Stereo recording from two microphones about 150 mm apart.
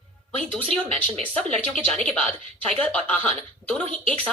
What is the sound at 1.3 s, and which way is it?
Speech, 5° left (ahead or behind).